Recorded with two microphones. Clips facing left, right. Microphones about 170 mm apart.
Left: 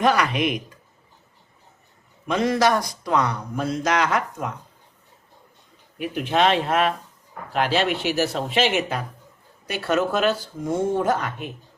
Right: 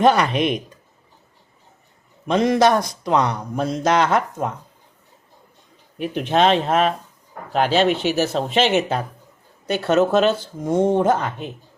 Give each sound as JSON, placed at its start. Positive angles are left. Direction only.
{"t": 0.0, "sound": "speech", "side_deg": -25}
{"t": 2.2, "sound": "speech", "side_deg": -25}
{"t": 6.0, "sound": "speech", "side_deg": -30}